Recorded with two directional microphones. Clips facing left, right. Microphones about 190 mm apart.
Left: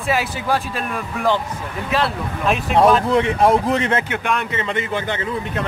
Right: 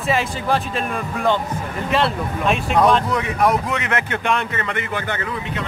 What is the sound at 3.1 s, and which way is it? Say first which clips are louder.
Speech: left 4 dB; 30° left (ahead or behind).